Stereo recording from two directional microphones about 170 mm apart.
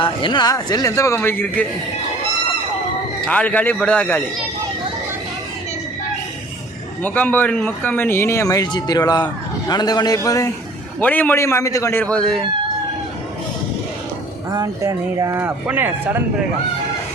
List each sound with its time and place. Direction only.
0.0 s speech: 30° left (ahead or behind); by 1.6 s 10° left (ahead or behind)
3.2 s speech: 10° left (ahead or behind)
7.0 s speech: 10° left (ahead or behind)
12.1 s speech: centre (ahead or behind)
14.5 s speech: 20° right (ahead or behind)